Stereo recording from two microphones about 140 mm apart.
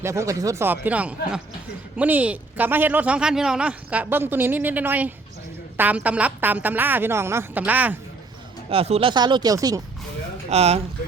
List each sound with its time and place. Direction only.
0.0 s speech: 20° right (ahead or behind)
8.7 s speech: 45° right (ahead or behind); by 9.8 s 25° right (ahead or behind)
10.5 s speech: 50° right (ahead or behind)